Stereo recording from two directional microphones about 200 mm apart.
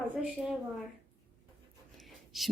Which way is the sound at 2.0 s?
Centre (ahead or behind).